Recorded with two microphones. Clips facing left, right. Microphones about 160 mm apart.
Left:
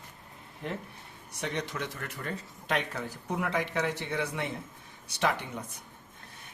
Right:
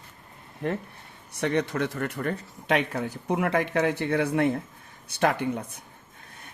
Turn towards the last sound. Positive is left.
turn(degrees=-55)  # may be behind; listen again after turning